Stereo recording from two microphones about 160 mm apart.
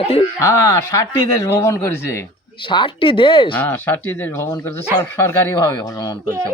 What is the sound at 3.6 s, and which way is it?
Speech, 10° left (ahead or behind).